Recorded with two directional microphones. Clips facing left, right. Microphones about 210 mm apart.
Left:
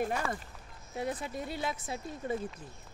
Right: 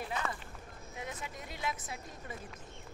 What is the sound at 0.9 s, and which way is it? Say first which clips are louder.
Speech: left 9 dB; 35° left (ahead or behind).